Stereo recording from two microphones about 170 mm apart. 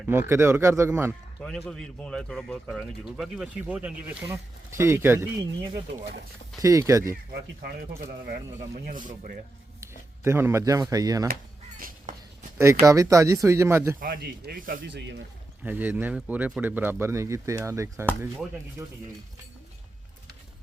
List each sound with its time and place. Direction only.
0.0 s speech: 15° right (ahead or behind)
1.4 s speech: 5° left (ahead or behind); by 5.3 s 15° right (ahead or behind)
6.6 s speech: 20° right (ahead or behind)
7.6 s speech: 70° right (ahead or behind)
8.9 s speech: 50° right (ahead or behind)
10.2 s speech: 15° right (ahead or behind)
11.8 s a sound: 50° right (ahead or behind)
12.5 s speech: 15° right (ahead or behind)
14.0 s speech: 60° right (ahead or behind)
14.8 s speech: 90° right
15.6 s speech: 10° right (ahead or behind)